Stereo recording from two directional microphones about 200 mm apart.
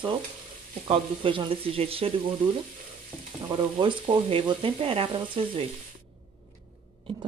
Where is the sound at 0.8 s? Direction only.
25° right (ahead or behind).